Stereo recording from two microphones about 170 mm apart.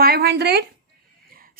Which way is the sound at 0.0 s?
65° right (ahead or behind).